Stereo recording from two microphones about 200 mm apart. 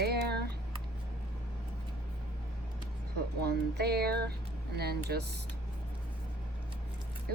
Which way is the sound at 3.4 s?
55° right (ahead or behind).